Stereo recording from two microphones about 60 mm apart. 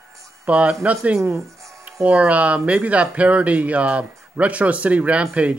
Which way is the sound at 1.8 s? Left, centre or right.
Right.